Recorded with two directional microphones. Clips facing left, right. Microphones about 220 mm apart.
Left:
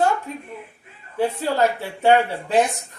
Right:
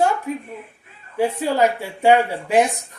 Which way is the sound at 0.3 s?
10° right (ahead or behind).